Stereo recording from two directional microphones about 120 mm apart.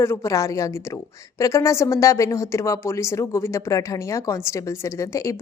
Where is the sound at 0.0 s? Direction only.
25° left (ahead or behind).